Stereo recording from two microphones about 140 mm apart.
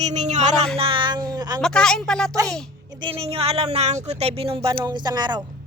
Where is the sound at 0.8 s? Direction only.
40° right (ahead or behind).